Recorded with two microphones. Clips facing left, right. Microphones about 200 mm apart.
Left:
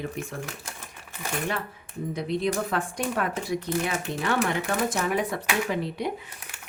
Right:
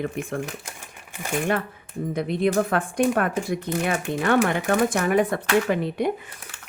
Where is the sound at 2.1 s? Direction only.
55° right (ahead or behind).